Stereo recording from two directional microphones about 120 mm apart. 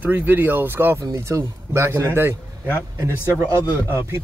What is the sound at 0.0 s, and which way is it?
Speech, 15° right (ahead or behind).